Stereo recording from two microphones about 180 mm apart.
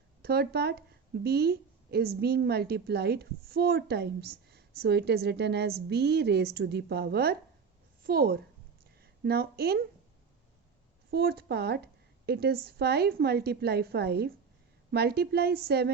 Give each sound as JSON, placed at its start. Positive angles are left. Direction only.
{"t": 0.2, "sound": "a woman's voice", "side_deg": -65}
{"t": 11.1, "sound": "a woman's voice", "side_deg": -60}